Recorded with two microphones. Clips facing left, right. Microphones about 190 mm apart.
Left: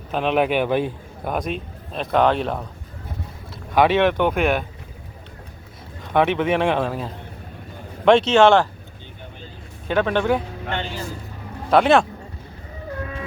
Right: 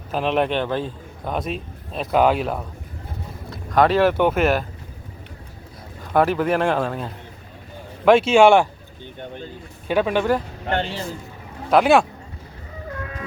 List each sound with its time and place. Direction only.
0.1 s speech: centre (ahead or behind)
1.4 s speech: centre (ahead or behind)
6.1 s speech: centre (ahead or behind)
9.9 s speech: 10° right (ahead or behind)
10.7 s speech: 40° right (ahead or behind)
11.7 s speech: 5° right (ahead or behind)